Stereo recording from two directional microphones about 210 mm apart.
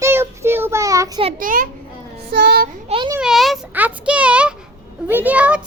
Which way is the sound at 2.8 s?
25° right (ahead or behind).